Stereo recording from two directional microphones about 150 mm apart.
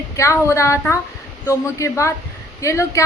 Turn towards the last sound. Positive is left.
turn(degrees=20)  # may be behind; listen again after turning